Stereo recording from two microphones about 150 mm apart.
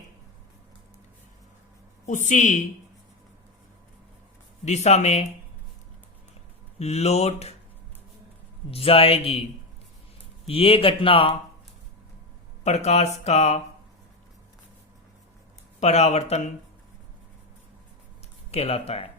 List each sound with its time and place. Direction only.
2.0 s speech: 55° left (ahead or behind)
4.6 s speech: 50° left (ahead or behind)
6.7 s speech: 45° left (ahead or behind)
8.7 s speech: 40° left (ahead or behind)
10.4 s speech: 40° left (ahead or behind)
12.6 s speech: 50° left (ahead or behind)
15.8 s speech: 45° left (ahead or behind)
18.5 s speech: 45° left (ahead or behind)